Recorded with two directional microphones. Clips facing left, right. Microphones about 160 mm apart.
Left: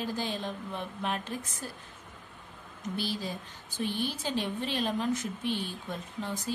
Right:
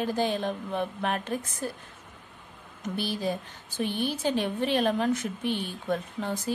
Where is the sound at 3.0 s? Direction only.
60° right (ahead or behind).